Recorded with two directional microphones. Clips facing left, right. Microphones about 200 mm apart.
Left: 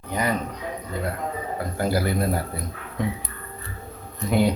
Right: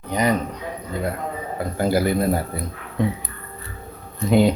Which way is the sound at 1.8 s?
20° right (ahead or behind).